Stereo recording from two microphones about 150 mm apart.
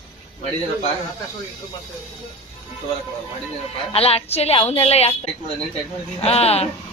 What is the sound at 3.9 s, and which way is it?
A woman's voice, 40° left (ahead or behind).